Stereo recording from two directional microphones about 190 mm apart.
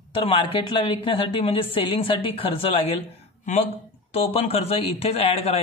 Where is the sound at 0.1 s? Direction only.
25° left (ahead or behind).